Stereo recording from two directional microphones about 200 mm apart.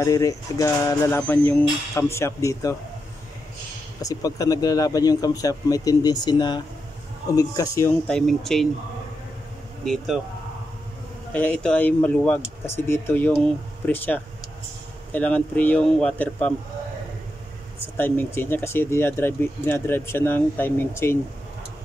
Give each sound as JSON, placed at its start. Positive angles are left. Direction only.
{"t": 0.0, "sound": "speech", "side_deg": 15}
{"t": 4.0, "sound": "speech", "side_deg": 15}
{"t": 8.1, "sound": "speech", "side_deg": 0}
{"t": 9.8, "sound": "speech", "side_deg": 0}
{"t": 11.3, "sound": "speech", "side_deg": 5}
{"t": 17.9, "sound": "speech", "side_deg": 10}